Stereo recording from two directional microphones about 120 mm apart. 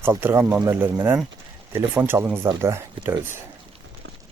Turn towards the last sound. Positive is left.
turn(degrees=-20)  # may be behind; listen again after turning